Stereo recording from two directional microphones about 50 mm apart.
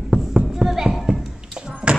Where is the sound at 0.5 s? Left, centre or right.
Centre.